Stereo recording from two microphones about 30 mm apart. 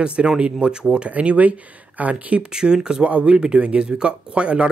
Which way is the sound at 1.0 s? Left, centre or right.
Right.